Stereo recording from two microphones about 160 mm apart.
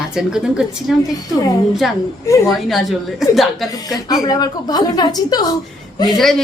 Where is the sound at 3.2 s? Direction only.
Centre (ahead or behind).